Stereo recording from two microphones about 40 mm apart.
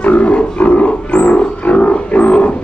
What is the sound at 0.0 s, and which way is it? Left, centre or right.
Wild animals, left.